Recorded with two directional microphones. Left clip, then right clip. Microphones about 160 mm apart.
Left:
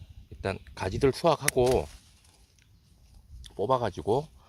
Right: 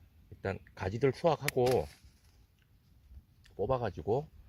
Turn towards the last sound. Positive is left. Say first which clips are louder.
# left 6 dB
turn(degrees=20)  # may be behind; listen again after turning